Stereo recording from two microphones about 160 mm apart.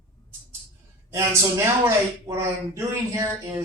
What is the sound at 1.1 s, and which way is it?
Speech, 20° right (ahead or behind).